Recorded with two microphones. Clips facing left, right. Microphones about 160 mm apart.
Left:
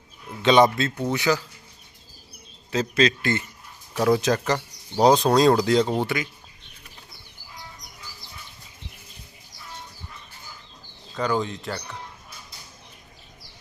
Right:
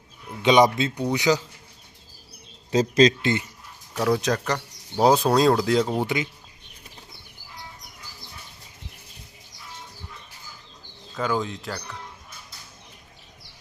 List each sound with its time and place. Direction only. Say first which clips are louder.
0.4 s speech: even; 15° right (ahead or behind)
2.6 s speech: right 4 dB; 30° right (ahead or behind)
3.9 s speech: left 2 dB; centre (ahead or behind)
11.1 s speech: left 1 dB; centre (ahead or behind)